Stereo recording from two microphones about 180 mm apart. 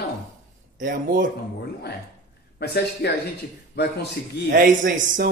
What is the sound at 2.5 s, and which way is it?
Speech, 65° left (ahead or behind).